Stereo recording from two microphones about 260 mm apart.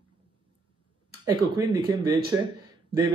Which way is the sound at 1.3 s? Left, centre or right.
Centre.